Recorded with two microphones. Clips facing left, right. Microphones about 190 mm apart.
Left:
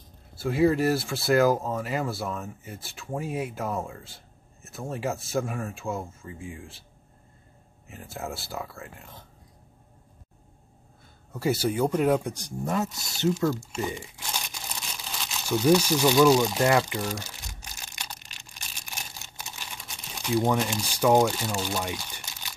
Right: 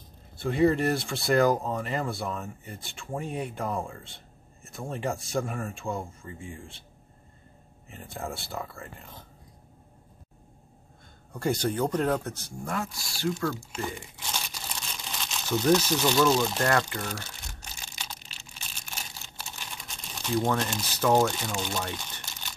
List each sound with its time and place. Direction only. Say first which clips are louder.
0.4 s speech: left 1 dB; 5° left (ahead or behind)
7.9 s speech: left 1 dB; centre (ahead or behind)
11.3 s speech: left 2 dB; 5° left (ahead or behind)
14.4 s crumpling: even; 5° left (ahead or behind)